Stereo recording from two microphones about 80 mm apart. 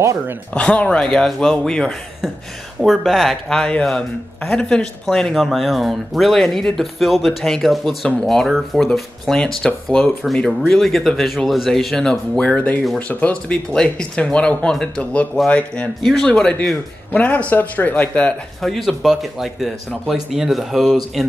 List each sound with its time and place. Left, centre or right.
0.0 s speech: right
0.5 s speech: centre
18.6 s speech: centre